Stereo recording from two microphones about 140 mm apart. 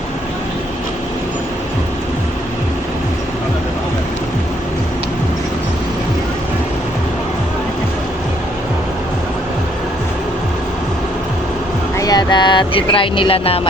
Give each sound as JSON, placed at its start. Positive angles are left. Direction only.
{"t": 11.9, "sound": "speech", "side_deg": 25}